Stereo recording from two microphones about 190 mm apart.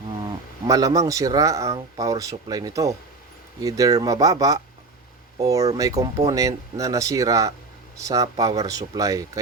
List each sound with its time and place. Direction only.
0.7 s speech: 20° right (ahead or behind)